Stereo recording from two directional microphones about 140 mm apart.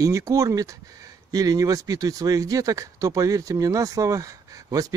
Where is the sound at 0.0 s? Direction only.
25° right (ahead or behind).